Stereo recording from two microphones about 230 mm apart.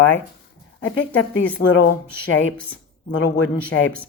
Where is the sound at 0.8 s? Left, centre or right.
Left.